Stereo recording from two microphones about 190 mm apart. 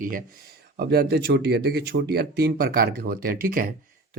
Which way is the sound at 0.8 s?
55° right (ahead or behind).